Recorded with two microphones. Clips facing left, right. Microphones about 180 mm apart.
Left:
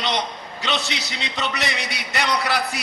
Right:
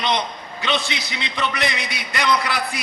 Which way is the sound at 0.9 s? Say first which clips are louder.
Right 1 dB; 55° right (ahead or behind).